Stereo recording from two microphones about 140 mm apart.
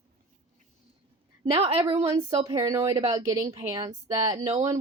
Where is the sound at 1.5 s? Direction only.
45° right (ahead or behind).